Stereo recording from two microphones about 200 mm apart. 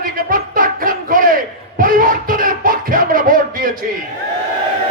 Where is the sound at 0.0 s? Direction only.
45° right (ahead or behind).